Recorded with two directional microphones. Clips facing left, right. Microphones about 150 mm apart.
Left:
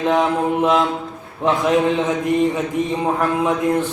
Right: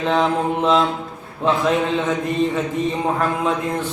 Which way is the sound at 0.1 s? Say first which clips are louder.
Even; 15° left (ahead or behind).